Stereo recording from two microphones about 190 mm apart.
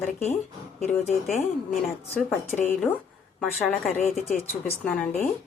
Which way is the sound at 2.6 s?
10° left (ahead or behind).